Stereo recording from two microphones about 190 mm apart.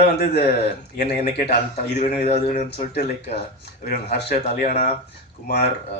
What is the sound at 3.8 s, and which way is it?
Speech, 55° left (ahead or behind).